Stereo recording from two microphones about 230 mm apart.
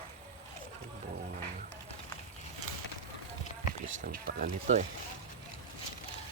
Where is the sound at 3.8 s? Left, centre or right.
Right.